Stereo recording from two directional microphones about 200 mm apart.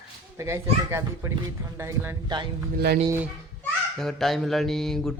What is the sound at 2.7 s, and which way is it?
Speech, 50° right (ahead or behind).